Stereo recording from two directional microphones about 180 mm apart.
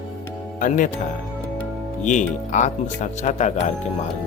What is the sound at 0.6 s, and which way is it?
Speech, 45° left (ahead or behind).